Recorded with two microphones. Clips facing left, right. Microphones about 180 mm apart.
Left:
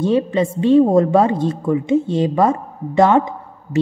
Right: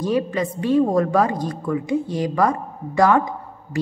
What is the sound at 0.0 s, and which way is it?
A woman's voice, 25° left (ahead or behind).